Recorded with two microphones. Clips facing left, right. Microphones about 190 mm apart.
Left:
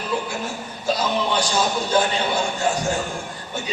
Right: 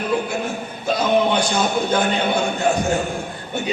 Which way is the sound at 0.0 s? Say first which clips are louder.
Right 4 dB; 60° right (ahead or behind).